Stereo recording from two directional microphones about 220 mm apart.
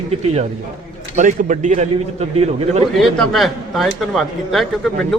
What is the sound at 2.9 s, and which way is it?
A man's voice, centre (ahead or behind).